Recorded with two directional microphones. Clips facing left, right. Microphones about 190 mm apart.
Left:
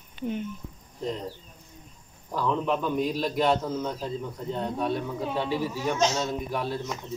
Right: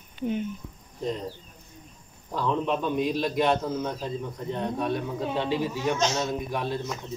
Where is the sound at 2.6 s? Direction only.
Centre (ahead or behind).